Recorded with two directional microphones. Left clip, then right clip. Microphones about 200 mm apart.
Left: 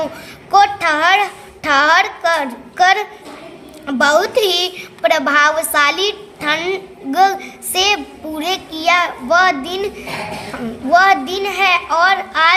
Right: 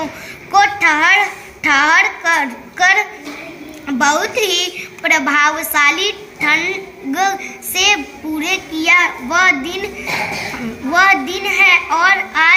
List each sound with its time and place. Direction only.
0.5 s child singing: 55° left (ahead or behind)
1.6 s a sound: 55° left (ahead or behind)
3.8 s a woman's voice: 55° left (ahead or behind)
10.9 s a child's voice: 55° left (ahead or behind)